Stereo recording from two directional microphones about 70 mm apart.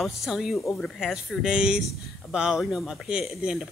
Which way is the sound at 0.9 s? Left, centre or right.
Centre.